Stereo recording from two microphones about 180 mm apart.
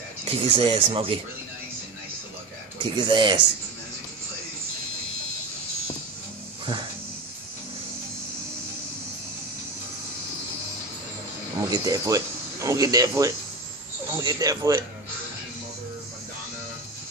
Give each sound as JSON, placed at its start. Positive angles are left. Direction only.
{"t": 0.2, "sound": "speech", "side_deg": -30}
{"t": 2.8, "sound": "speech", "side_deg": -25}
{"t": 6.6, "sound": "music", "side_deg": -30}
{"t": 11.7, "sound": "speech", "side_deg": -20}